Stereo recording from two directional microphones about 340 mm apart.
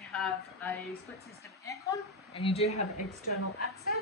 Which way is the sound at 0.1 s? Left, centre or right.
Centre.